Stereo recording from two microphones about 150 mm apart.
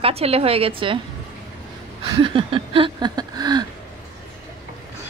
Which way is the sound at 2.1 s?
35° right (ahead or behind).